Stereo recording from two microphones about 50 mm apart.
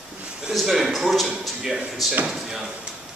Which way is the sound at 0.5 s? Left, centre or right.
Centre.